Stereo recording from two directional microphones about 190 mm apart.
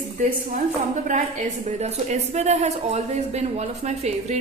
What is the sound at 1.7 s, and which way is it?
Speech, 35° right (ahead or behind).